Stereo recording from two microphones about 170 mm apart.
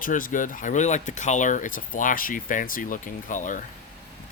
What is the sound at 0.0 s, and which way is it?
Speech, 50° left (ahead or behind).